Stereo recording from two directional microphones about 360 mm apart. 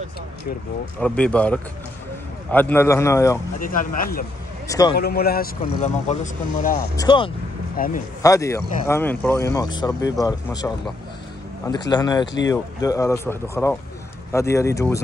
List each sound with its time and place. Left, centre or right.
0.9 s speech: centre
3.5 s speech: left
4.6 s a man's voice: centre
4.9 s speech: left
7.7 s speech: left
8.2 s speech: centre